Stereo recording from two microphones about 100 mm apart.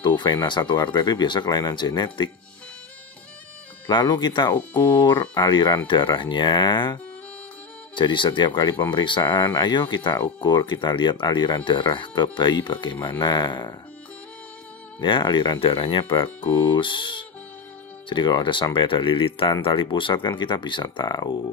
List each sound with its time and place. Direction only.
0.0 s speech: 50° left (ahead or behind)
3.8 s speech: 50° left (ahead or behind)
15.0 s speech: 50° left (ahead or behind)